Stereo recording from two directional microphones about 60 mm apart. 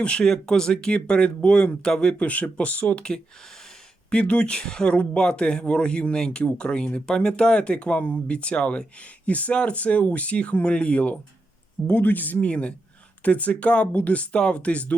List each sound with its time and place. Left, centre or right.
0.0 s speech: centre